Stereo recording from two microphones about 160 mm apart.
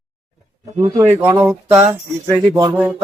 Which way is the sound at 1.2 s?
10° right (ahead or behind).